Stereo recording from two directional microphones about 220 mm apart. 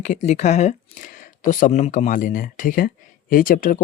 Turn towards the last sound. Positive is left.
turn(degrees=40)  # may be behind; listen again after turning